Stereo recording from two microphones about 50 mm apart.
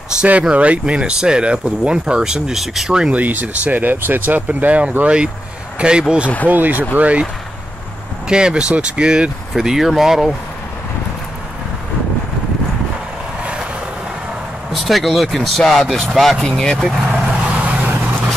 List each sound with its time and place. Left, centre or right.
0.3 s speech: right; by 2.9 s centre
3.1 s speech: right
4.5 s speech: right
6.4 s speech: right
8.3 s speech: centre
9.6 s speech: centre
13.4 s vehicle: right
14.7 s speech: centre
17.1 s vehicle: right